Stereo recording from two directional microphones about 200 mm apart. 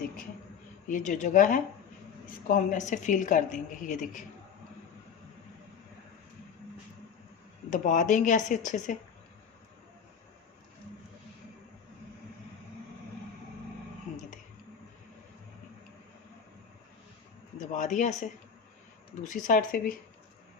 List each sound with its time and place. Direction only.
0.9 s a woman's voice: 40° left (ahead or behind)
7.7 s a woman's voice: 40° left (ahead or behind)
17.6 s a woman's voice: 40° left (ahead or behind)